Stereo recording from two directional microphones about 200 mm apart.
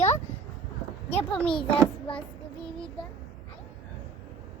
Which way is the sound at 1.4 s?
5° left (ahead or behind).